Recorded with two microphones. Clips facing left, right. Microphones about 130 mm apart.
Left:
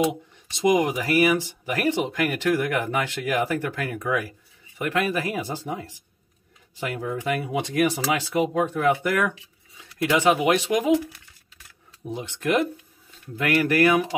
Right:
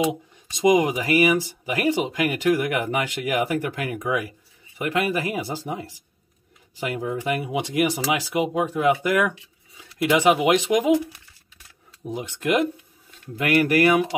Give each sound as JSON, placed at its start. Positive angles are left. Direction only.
{"t": 0.6, "sound": "speech", "side_deg": -15}
{"t": 12.0, "sound": "speech", "side_deg": -10}